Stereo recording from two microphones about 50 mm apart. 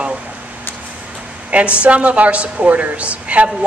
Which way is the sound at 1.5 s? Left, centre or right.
Right.